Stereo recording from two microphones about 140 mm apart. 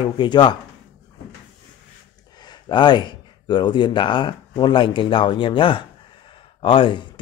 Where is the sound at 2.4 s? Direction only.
35° left (ahead or behind).